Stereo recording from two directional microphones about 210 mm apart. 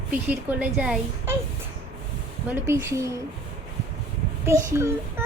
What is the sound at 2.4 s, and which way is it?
Speech, 15° right (ahead or behind).